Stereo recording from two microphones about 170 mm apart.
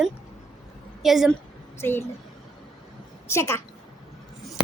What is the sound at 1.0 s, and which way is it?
Speech, centre (ahead or behind).